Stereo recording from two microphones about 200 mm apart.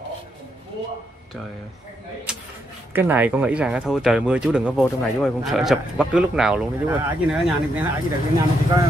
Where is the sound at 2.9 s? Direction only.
10° right (ahead or behind).